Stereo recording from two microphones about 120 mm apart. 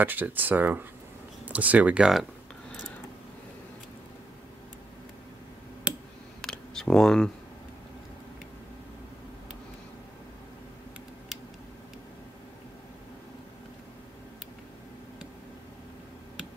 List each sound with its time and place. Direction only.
0.0 s speech: 15° right (ahead or behind)
6.4 s camera: 5° left (ahead or behind)